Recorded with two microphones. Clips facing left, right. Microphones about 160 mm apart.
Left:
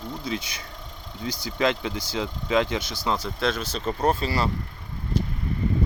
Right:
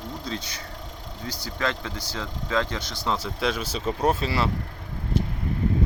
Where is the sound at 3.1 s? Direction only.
10° right (ahead or behind).